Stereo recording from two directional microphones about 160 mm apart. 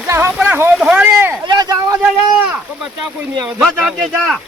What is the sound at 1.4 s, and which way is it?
Speech, 25° right (ahead or behind).